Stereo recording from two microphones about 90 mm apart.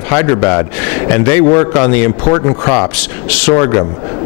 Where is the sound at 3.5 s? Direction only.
25° left (ahead or behind).